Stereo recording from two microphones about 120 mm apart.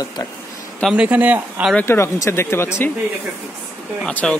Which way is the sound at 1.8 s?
20° left (ahead or behind).